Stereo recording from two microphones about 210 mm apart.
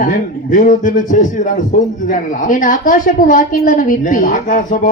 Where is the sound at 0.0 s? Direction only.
40° left (ahead or behind).